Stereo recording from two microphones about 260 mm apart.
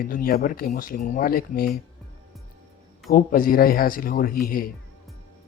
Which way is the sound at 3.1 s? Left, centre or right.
Left.